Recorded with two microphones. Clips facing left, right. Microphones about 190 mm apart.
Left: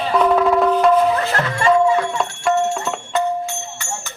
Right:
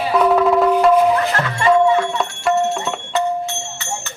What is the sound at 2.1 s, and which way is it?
Music, centre (ahead or behind).